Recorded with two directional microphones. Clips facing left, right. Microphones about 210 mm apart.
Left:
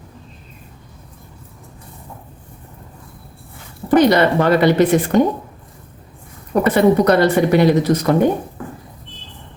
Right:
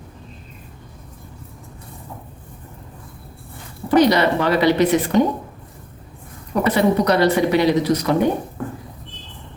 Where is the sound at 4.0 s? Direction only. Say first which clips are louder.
Left 2 dB; 50° left (ahead or behind).